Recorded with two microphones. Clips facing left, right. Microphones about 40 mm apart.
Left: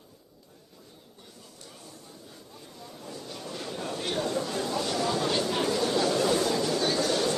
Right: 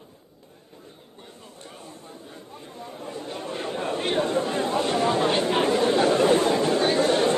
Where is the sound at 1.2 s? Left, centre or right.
Right.